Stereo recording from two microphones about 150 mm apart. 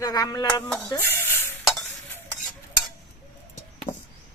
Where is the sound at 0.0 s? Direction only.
25° left (ahead or behind).